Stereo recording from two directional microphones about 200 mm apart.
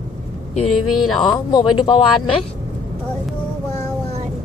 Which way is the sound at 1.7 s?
25° left (ahead or behind).